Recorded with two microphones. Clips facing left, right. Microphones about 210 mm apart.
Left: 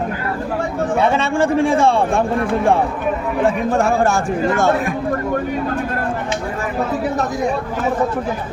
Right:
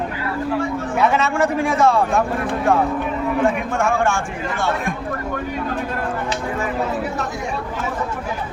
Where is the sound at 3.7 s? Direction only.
35° left (ahead or behind).